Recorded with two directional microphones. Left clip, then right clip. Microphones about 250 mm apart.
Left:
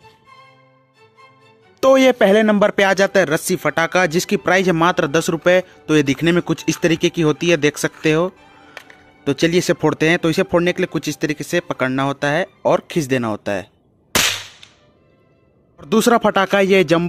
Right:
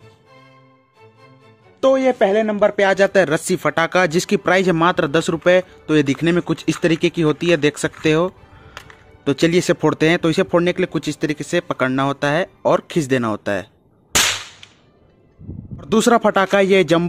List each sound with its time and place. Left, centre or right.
1.8 s speech: left
3.0 s speech: centre
8.0 s music: centre
9.2 s speech: centre
15.8 s speech: centre